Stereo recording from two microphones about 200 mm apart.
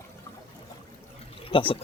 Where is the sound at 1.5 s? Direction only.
25° left (ahead or behind).